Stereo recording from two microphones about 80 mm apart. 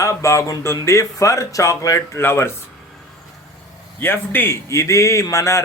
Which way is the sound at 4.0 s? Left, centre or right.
Left.